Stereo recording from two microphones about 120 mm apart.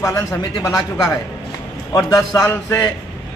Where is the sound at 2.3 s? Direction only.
30° left (ahead or behind).